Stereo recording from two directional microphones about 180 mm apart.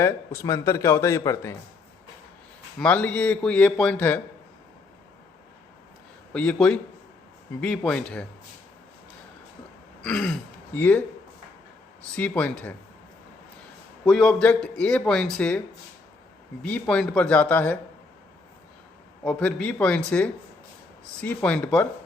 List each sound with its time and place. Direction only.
0.0 s speech: 15° left (ahead or behind)
2.7 s speech: 10° left (ahead or behind)
6.3 s speech: 5° left (ahead or behind)
10.0 s speech: 5° left (ahead or behind)
12.1 s speech: 5° left (ahead or behind)
14.0 s speech: centre (ahead or behind)
16.6 s speech: 5° left (ahead or behind)
19.2 s speech: 5° left (ahead or behind)